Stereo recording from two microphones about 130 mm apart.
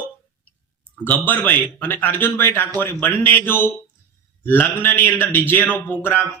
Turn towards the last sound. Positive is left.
turn(degrees=15)  # may be behind; listen again after turning